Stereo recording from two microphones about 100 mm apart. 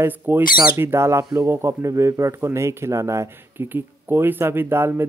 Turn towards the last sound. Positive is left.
turn(degrees=-25)  # may be behind; listen again after turning